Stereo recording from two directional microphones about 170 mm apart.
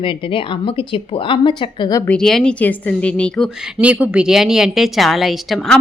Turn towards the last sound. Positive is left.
turn(degrees=0)  # may be behind; listen again after turning